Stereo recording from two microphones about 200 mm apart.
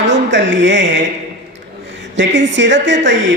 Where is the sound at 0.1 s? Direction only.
65° right (ahead or behind).